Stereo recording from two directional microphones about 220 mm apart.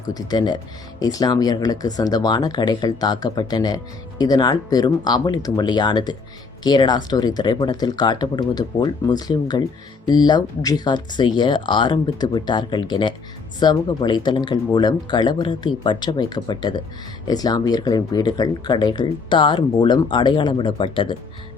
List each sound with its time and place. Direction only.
0.1 s speech: 15° left (ahead or behind)